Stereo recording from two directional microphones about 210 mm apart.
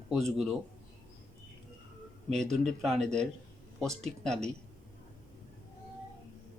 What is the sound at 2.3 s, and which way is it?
Speech, 5° left (ahead or behind).